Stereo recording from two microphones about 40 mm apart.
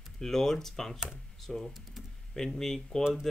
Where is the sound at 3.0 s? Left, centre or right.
Centre.